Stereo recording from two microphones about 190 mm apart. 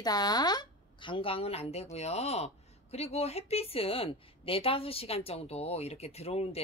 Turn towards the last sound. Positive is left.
turn(degrees=35)  # may be behind; listen again after turning